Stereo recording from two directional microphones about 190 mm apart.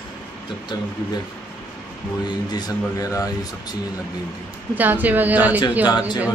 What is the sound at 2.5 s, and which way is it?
Speech, 20° left (ahead or behind).